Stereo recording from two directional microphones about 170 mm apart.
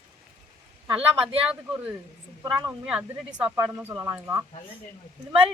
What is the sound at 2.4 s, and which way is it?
Speech, 25° right (ahead or behind).